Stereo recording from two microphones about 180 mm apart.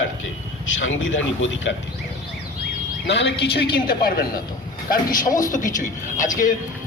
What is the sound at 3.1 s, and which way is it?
Speech, 80° left.